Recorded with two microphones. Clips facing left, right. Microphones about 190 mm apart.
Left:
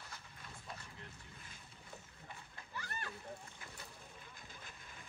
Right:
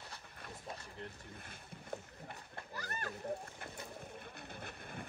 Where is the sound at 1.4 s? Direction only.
55° right (ahead or behind).